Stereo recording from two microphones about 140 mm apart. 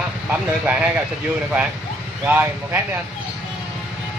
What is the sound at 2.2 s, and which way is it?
Speech, 10° right (ahead or behind).